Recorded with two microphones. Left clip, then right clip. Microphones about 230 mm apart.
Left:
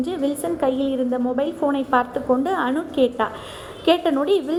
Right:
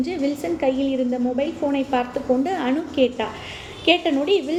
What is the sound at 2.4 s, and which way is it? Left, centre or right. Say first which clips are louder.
A woman's voice: left 1 dB; centre.